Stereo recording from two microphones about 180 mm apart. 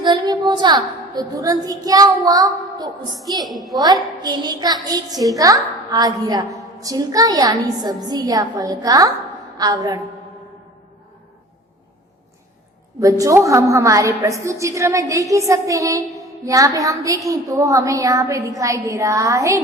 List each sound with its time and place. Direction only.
0.0 s a woman's voice: 25° right (ahead or behind)
3.4 s a woman's voice: centre (ahead or behind)
4.2 s a woman's voice: 25° right (ahead or behind)
13.0 s a woman's voice: 20° right (ahead or behind)